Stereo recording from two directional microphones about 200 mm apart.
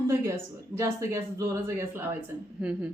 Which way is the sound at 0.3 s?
15° right (ahead or behind).